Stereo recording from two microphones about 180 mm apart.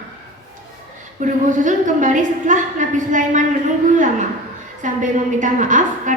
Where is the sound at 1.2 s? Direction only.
45° right (ahead or behind).